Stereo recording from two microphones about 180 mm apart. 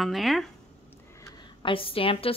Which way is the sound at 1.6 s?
30° left (ahead or behind).